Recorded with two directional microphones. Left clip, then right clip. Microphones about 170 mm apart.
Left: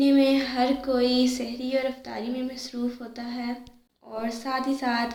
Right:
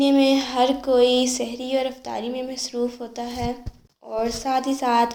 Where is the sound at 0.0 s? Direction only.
30° right (ahead or behind).